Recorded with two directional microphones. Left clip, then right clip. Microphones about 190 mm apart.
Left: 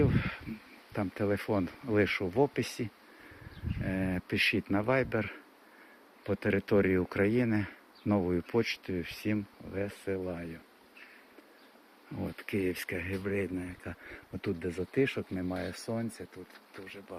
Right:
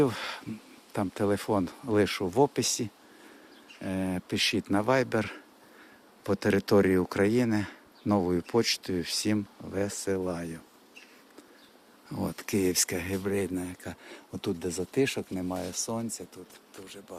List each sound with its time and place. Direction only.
0.0 s speech: 35° right (ahead or behind)
12.1 s speech: 35° right (ahead or behind)
15.4 s speech: 15° right (ahead or behind)